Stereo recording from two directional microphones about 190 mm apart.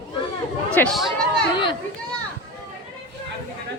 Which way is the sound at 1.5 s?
25° left (ahead or behind).